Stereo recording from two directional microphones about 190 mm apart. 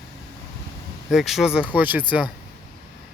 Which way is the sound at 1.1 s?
Centre (ahead or behind).